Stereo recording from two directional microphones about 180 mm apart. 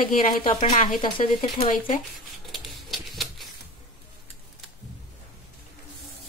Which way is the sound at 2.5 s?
Centre (ahead or behind).